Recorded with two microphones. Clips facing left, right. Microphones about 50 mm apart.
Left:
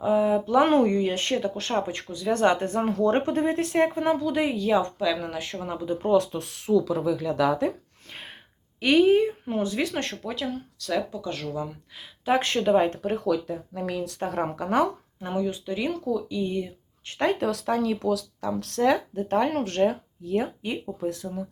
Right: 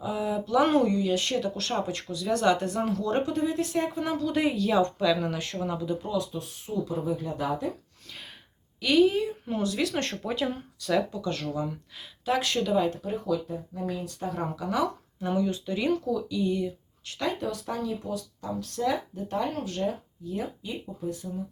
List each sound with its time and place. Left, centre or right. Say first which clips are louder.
0.0 s speech: left 8 dB; left
4.2 s speech: left 1 dB; centre
6.0 s speech: left 8 dB; left
8.8 s a woman's voice: left 3 dB; left
9.9 s speech: even; centre
12.3 s speech: left 4 dB; left
12.6 s speech: left 5 dB; left
15.2 s speech: right 1 dB; centre
16.3 s speech: right 1 dB; left
17.4 s speech: left 6 dB; left